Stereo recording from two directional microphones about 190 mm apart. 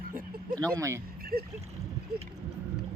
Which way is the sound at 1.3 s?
50° right (ahead or behind).